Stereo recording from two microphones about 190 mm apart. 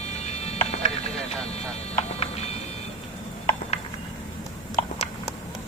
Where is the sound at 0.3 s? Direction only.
35° left (ahead or behind).